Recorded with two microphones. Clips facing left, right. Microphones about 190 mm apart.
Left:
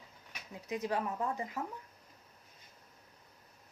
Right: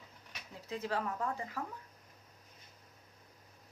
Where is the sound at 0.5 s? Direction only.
15° left (ahead or behind).